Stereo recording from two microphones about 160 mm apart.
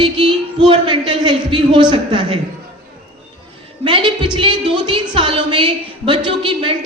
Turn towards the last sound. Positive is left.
turn(degrees=-30)  # may be behind; listen again after turning